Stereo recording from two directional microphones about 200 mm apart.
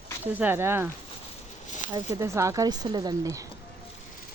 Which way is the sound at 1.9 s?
15° right (ahead or behind).